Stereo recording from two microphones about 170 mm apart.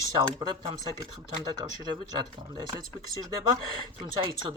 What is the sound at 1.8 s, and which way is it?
Speech, 25° right (ahead or behind).